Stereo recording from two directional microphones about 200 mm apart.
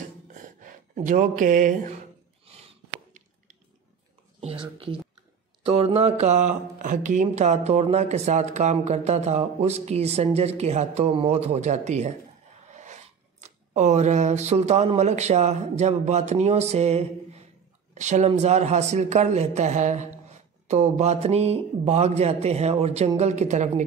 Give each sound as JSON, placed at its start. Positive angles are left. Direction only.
{"t": 0.4, "sound": "speech", "side_deg": -40}
{"t": 2.4, "sound": "a sound", "side_deg": -30}
{"t": 4.4, "sound": "speech", "side_deg": -30}